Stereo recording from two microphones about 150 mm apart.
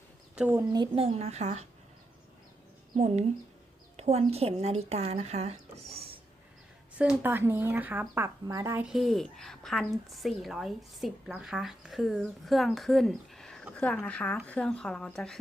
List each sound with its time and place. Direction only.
0.3 s speech: 10° right (ahead or behind)
0.9 s speech: 40° right (ahead or behind)
2.9 s speech: 50° right (ahead or behind)
7.0 s speech: 10° right (ahead or behind)
8.8 s a woman's voice: centre (ahead or behind)